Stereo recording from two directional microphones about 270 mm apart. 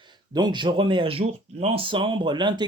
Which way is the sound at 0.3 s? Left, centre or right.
Centre.